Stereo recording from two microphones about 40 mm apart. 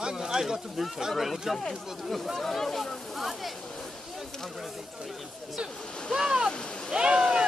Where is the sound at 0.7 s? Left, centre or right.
Centre.